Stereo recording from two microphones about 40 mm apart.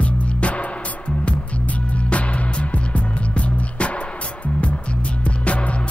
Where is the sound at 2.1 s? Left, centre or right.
Left.